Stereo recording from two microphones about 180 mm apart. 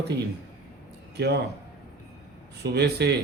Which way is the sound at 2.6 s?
65° right (ahead or behind).